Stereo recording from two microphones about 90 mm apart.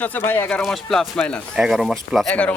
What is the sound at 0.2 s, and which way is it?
Speech, 25° left (ahead or behind).